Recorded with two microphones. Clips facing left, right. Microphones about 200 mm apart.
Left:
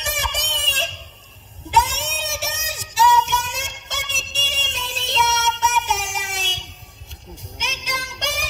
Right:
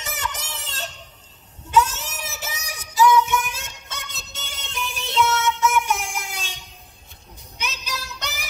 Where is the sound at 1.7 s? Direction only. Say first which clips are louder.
Right 1 dB; 80° left.